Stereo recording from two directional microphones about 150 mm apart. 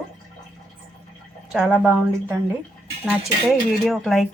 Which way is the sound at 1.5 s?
10° right (ahead or behind).